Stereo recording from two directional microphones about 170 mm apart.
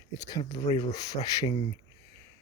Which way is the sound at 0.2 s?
20° left (ahead or behind).